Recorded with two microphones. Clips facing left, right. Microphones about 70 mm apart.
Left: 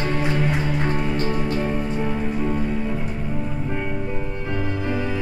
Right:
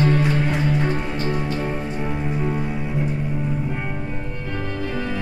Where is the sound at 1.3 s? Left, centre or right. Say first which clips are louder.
Left 1 dB; centre.